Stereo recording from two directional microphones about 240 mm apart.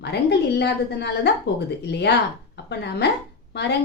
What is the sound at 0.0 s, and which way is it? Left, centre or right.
A woman's voice, left.